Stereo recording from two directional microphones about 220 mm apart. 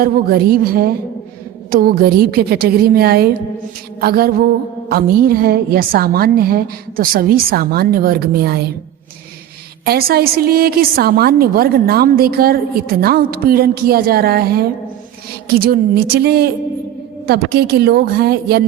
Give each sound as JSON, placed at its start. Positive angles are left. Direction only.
{"t": 0.0, "sound": "a woman's voice", "side_deg": -45}
{"t": 9.8, "sound": "a woman's voice", "side_deg": -45}